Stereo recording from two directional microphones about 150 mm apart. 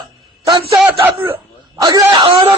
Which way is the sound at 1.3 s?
20° right (ahead or behind).